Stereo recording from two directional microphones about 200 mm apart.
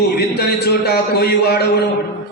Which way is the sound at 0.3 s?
55° left (ahead or behind).